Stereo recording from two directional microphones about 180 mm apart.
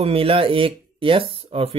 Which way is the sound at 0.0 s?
30° right (ahead or behind).